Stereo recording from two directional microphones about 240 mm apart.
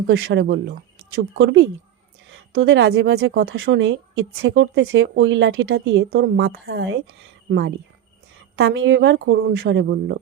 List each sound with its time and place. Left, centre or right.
0.1 s speech: right
3.5 s speech: right
8.5 s speech: right